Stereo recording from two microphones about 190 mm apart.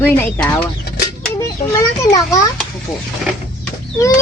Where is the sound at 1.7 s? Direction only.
20° left (ahead or behind).